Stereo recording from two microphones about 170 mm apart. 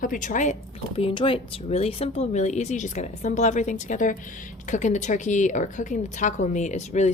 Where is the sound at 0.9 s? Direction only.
35° left (ahead or behind).